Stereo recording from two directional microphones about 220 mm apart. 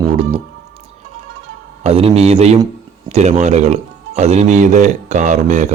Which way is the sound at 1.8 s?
25° right (ahead or behind).